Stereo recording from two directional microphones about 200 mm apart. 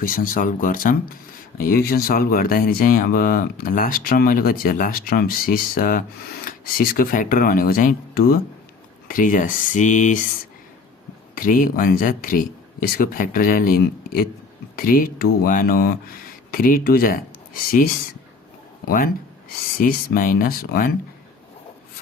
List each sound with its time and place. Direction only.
0.0 s speech: 45° left (ahead or behind)
11.3 s speech: 45° left (ahead or behind)